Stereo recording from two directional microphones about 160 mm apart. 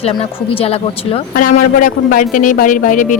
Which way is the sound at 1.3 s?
60° left (ahead or behind).